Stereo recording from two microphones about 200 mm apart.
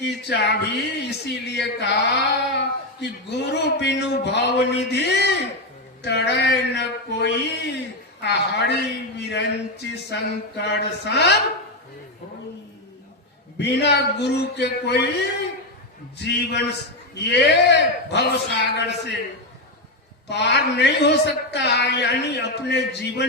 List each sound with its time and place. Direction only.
0.0 s speech: 60° left (ahead or behind)
13.6 s speech: 60° left (ahead or behind)
20.2 s speech: 60° left (ahead or behind)